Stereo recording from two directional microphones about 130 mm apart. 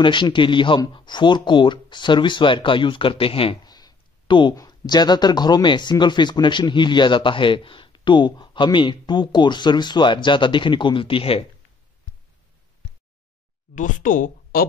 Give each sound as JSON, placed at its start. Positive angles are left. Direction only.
{"t": 0.0, "sound": "speech", "side_deg": 35}
{"t": 3.6, "sound": "a sound", "side_deg": 30}
{"t": 4.6, "sound": "speech", "side_deg": 30}
{"t": 13.7, "sound": "speech", "side_deg": 85}